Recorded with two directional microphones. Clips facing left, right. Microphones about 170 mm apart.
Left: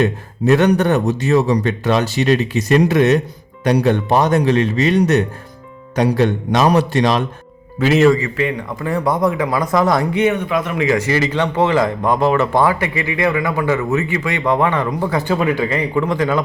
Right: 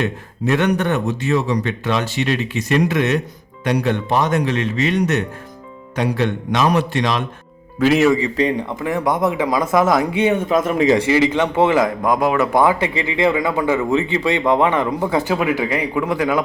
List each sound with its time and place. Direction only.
0.0 s a man's voice: 40° left (ahead or behind)
7.8 s a man's voice: centre (ahead or behind)
8.1 s speech: 30° right (ahead or behind)
9.0 s speech: 20° right (ahead or behind); by 10.1 s 5° right (ahead or behind)
10.5 s speech: 45° right (ahead or behind)
11.1 s speech: 15° right (ahead or behind)
12.5 s a man's voice: 20° right (ahead or behind)